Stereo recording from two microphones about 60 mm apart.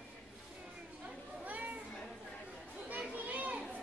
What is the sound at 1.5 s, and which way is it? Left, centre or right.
Children playing, right.